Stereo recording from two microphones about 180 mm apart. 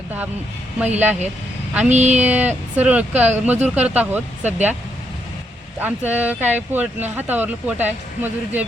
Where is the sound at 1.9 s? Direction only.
40° right (ahead or behind).